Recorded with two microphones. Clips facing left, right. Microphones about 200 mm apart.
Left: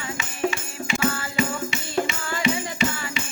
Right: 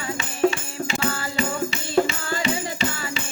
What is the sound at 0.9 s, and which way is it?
Music, 30° right (ahead or behind).